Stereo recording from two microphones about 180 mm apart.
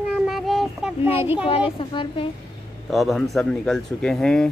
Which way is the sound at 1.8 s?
30° left (ahead or behind).